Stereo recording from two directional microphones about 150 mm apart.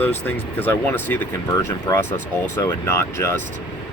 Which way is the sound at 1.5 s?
25° left (ahead or behind).